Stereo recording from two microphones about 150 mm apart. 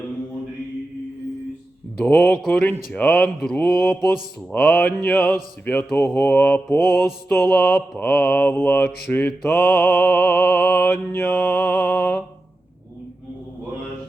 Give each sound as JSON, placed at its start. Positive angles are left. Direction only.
{"t": 2.0, "sound": "speech", "side_deg": 10}